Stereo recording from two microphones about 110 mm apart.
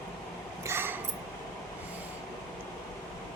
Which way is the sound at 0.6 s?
20° right (ahead or behind).